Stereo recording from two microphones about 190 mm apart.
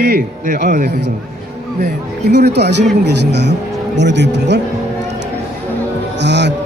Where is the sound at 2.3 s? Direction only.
60° right (ahead or behind).